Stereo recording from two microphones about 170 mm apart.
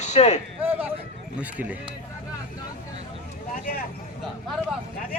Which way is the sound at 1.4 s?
10° right (ahead or behind).